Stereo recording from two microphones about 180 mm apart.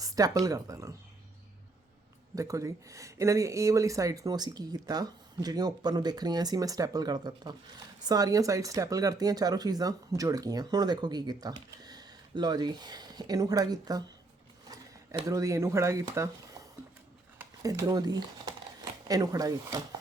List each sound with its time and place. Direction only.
0.0 s speech: 20° right (ahead or behind)
2.3 s speech: 20° right (ahead or behind)
15.3 s speech: 15° right (ahead or behind)